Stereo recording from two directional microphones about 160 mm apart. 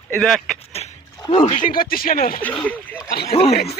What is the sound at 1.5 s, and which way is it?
Speech, 55° left (ahead or behind).